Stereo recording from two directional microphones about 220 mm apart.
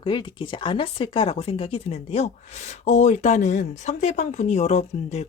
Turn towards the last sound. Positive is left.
turn(degrees=30)  # may be behind; listen again after turning